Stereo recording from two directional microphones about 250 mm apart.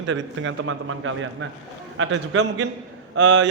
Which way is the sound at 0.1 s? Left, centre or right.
Right.